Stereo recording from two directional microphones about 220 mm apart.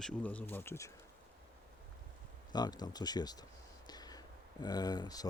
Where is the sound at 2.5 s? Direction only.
20° left (ahead or behind).